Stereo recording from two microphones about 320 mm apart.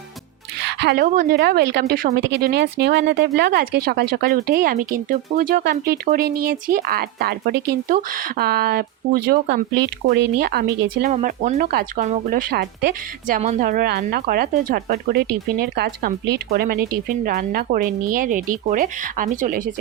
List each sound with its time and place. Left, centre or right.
0.8 s speech: right